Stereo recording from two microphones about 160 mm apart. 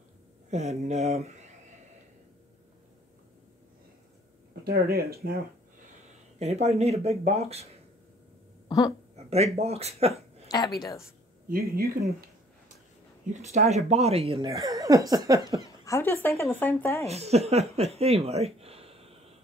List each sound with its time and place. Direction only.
0.5 s speech: 45° right (ahead or behind)
4.6 s speech: 75° right (ahead or behind)
6.4 s speech: 45° right (ahead or behind)
8.6 s a sound: 25° left (ahead or behind)
9.1 s speech: 40° right (ahead or behind)
11.4 s speech: 70° right (ahead or behind)
13.3 s speech: 45° right (ahead or behind)
14.4 s speech: 25° right (ahead or behind)
15.8 s speech: 15° left (ahead or behind)
17.0 s speech: 40° right (ahead or behind)